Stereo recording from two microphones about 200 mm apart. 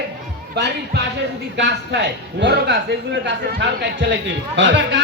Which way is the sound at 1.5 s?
60° right (ahead or behind).